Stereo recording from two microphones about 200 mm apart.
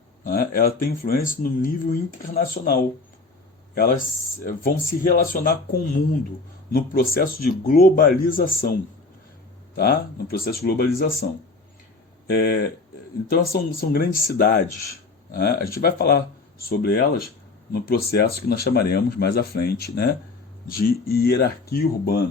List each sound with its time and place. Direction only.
0.3 s speech: 45° left (ahead or behind)
9.7 s speech: 50° left (ahead or behind)
12.3 s speech: 55° left (ahead or behind)